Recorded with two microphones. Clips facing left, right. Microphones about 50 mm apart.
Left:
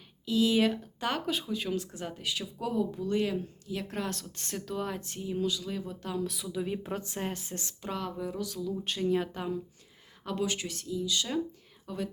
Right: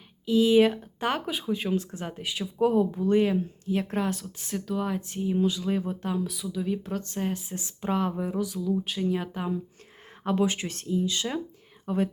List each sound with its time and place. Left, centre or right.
0.3 s speech: right
1.3 s speech: centre
1.5 s speech: right
4.0 s speech: centre; by 6.1 s right
6.2 s speech: centre
7.3 s speech: centre
7.6 s speech: right
10.2 s speech: right